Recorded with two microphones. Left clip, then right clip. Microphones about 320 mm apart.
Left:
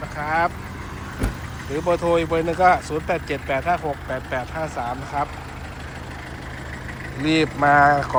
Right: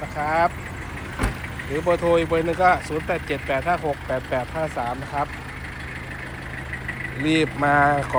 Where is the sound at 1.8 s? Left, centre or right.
Centre.